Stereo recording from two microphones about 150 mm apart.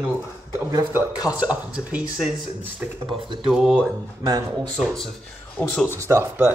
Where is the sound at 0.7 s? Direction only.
20° right (ahead or behind).